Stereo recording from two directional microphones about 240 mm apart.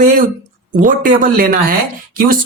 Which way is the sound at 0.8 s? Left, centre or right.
Right.